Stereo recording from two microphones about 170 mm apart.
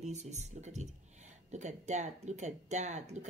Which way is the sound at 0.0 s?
40° right (ahead or behind).